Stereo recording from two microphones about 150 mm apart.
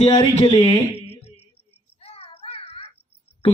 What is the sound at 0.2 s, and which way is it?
Speech, 40° left (ahead or behind).